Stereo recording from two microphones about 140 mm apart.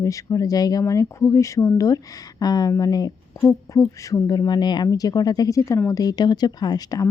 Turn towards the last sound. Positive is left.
turn(degrees=25)  # may be behind; listen again after turning